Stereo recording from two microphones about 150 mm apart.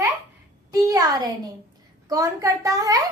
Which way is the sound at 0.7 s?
25° right (ahead or behind).